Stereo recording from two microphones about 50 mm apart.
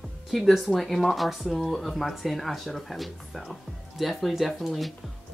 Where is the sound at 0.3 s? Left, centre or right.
Centre.